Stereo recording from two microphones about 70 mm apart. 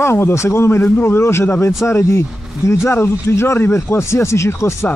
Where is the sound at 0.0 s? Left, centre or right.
Left.